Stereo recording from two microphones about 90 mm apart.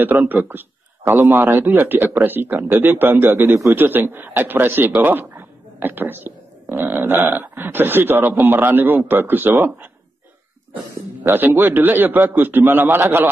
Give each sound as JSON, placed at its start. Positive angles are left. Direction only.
{"t": 0.3, "sound": "speech", "side_deg": -20}
{"t": 11.2, "sound": "speech", "side_deg": -25}